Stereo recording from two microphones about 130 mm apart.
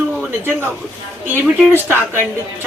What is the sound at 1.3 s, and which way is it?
Speech, 15° left (ahead or behind).